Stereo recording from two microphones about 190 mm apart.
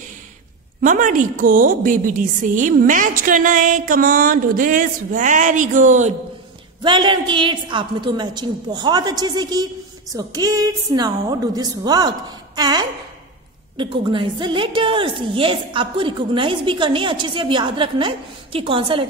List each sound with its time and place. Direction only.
0.8 s a woman's voice: 45° right (ahead or behind)
6.8 s a woman's voice: 25° right (ahead or behind)